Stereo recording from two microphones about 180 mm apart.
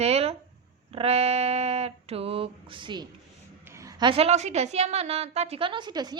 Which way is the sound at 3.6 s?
15° right (ahead or behind).